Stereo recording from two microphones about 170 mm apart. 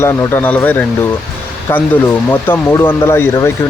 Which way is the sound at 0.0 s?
15° left (ahead or behind).